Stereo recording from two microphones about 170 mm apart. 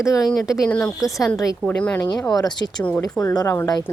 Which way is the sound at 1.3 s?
20° left (ahead or behind).